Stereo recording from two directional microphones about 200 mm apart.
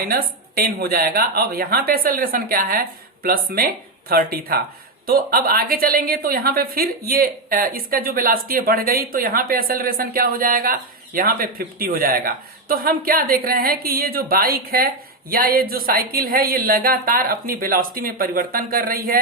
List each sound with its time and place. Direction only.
0.0 s a woman's voice: 50° right (ahead or behind)